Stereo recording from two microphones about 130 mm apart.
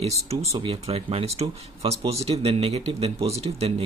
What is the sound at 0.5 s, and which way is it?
Speech, 45° right (ahead or behind).